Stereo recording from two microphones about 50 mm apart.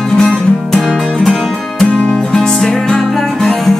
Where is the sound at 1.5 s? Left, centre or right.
Centre.